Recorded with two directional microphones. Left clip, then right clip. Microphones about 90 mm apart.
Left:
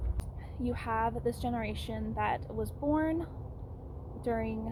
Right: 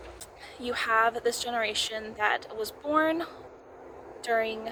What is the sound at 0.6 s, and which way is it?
Speech, 25° right (ahead or behind).